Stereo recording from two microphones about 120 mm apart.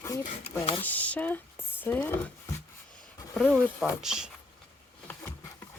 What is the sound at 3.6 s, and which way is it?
Speech, centre (ahead or behind).